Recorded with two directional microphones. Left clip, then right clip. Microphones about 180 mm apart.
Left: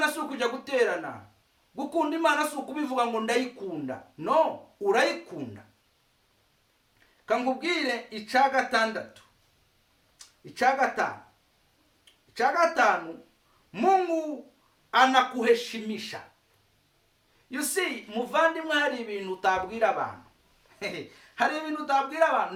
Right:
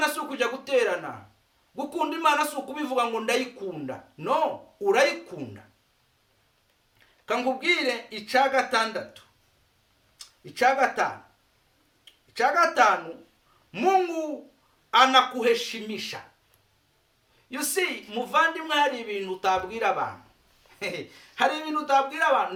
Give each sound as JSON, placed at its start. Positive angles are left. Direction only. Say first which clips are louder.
{"t": 0.0, "sound": "a woman's voice", "louder": "right 1 dB", "side_deg": 10}
{"t": 7.3, "sound": "speech", "louder": "right 2 dB", "side_deg": 5}
{"t": 10.2, "sound": "speech", "louder": "right 3 dB", "side_deg": 5}
{"t": 12.3, "sound": "a woman's voice", "louder": "right 2 dB", "side_deg": 5}
{"t": 17.5, "sound": "a woman's voice", "louder": "right 2 dB", "side_deg": 10}
{"t": 21.3, "sound": "a woman's voice", "louder": "right 3 dB", "side_deg": 5}